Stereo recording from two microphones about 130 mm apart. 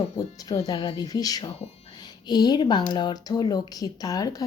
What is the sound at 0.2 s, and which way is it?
Speech, 30° left (ahead or behind).